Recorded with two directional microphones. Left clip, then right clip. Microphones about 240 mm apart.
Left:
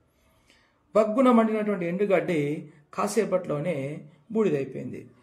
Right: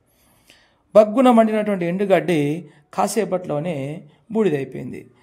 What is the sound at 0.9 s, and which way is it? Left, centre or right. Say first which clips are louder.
A man's voice: right 8 dB; right.